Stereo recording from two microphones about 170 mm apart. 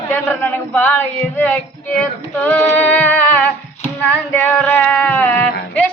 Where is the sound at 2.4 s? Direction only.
10° left (ahead or behind).